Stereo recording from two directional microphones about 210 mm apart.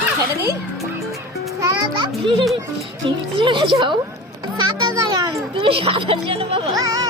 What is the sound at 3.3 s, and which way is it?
A child's voice, 25° right (ahead or behind).